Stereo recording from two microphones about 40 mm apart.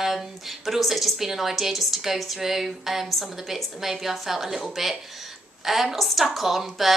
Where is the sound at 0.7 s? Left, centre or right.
Centre.